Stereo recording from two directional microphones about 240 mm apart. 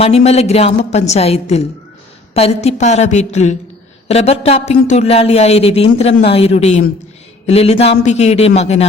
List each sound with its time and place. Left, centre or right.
0.0 s speech: left